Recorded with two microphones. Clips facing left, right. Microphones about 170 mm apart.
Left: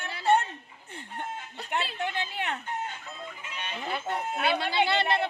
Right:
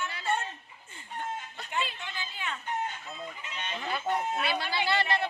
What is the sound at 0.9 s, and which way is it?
Chicken, 70° left (ahead or behind).